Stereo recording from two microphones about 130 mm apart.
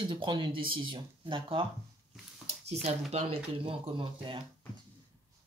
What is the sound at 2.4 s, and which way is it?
Speech, 55° right (ahead or behind).